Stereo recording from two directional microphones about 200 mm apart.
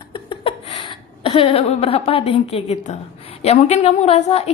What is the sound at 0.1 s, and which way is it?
A woman's voice, 25° left (ahead or behind).